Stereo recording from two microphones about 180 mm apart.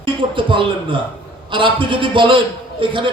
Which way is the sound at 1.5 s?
25° right (ahead or behind).